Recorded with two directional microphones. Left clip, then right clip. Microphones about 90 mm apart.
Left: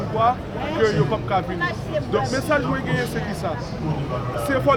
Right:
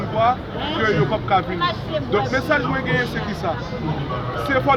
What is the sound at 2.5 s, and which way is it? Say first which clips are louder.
Speech: right 2 dB; 45° left (ahead or behind).